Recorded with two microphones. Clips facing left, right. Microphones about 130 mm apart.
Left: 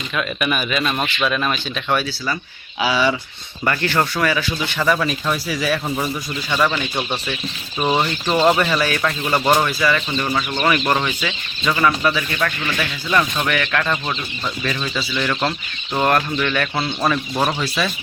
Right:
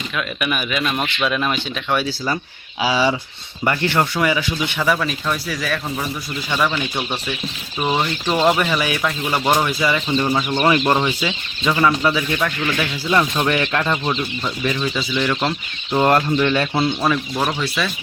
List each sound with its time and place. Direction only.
0.2 s speech: 5° right (ahead or behind)
2.8 s speech: 25° right (ahead or behind)
4.8 s speech: centre (ahead or behind)
9.6 s speech: 20° right (ahead or behind)
17.3 s speech: 5° left (ahead or behind)